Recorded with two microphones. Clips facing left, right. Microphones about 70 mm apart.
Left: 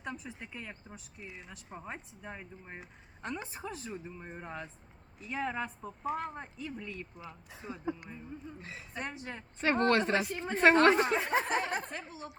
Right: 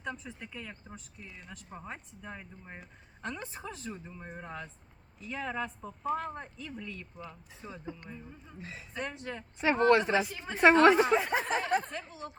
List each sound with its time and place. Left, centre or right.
0.0 s speech: centre
8.6 s speech: centre
9.6 s speech: centre